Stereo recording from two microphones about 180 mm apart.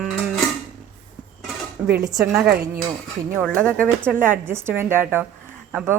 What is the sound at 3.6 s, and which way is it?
Speech, 5° left (ahead or behind).